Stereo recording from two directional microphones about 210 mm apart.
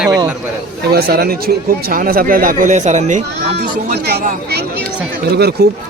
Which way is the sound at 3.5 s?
45° right (ahead or behind).